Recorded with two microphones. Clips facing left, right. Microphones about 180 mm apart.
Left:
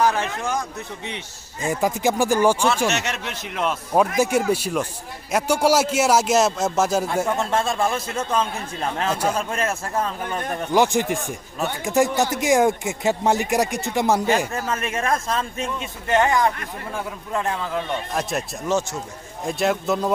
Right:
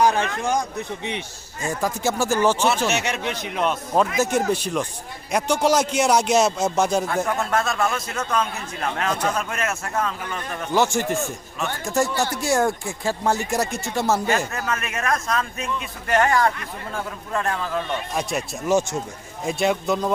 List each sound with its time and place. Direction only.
0.0 s a sound: 15° right (ahead or behind)
1.6 s speech: 15° left (ahead or behind)
2.8 s speech: centre (ahead or behind)
7.3 s a man's voice: 25° left (ahead or behind)
9.0 s speech: 10° left (ahead or behind)
9.3 s speech: 30° left (ahead or behind)
10.2 s a man's voice: 45° left (ahead or behind)
10.8 s speech: 15° left (ahead or behind)
14.5 s a man's voice: 30° left (ahead or behind)
18.1 s speech: centre (ahead or behind)
18.7 s speech: 15° right (ahead or behind)
19.5 s speech: centre (ahead or behind)